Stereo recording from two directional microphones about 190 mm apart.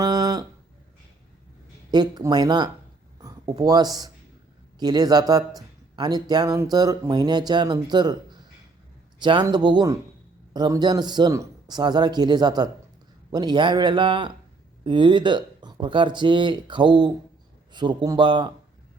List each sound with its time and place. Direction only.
0.0 s a sound: 20° right (ahead or behind)
1.9 s speech: 20° right (ahead or behind)
9.1 s speech: 25° right (ahead or behind)